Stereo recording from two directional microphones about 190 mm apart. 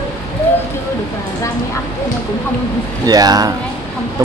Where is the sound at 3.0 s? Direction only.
20° right (ahead or behind).